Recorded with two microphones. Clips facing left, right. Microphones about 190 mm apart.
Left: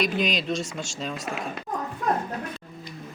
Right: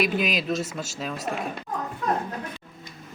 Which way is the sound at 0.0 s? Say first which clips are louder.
Right 1 dB; 5° right (ahead or behind).